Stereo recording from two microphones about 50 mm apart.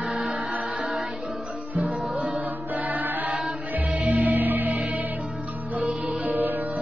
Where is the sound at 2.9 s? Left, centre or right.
Right.